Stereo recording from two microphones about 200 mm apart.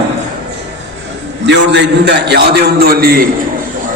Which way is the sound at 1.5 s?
60° right (ahead or behind).